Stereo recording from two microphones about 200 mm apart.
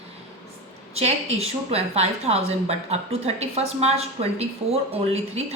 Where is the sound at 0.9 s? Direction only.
30° right (ahead or behind).